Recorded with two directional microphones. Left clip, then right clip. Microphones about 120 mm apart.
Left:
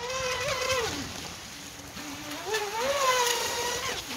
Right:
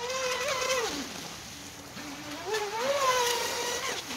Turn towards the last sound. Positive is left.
turn(degrees=0)  # may be behind; listen again after turning